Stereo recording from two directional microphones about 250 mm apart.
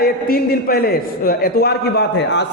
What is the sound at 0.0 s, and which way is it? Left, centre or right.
A man's voice, left.